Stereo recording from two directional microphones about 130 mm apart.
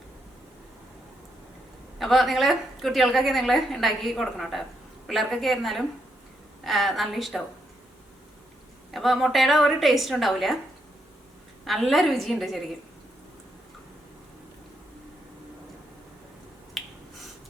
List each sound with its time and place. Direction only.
2.0 s a woman's voice: centre (ahead or behind)
8.9 s a woman's voice: centre (ahead or behind)
11.6 s a woman's voice: centre (ahead or behind)
16.8 s finger snapping: centre (ahead or behind)